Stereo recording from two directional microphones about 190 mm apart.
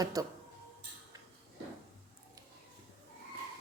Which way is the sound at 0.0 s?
20° right (ahead or behind).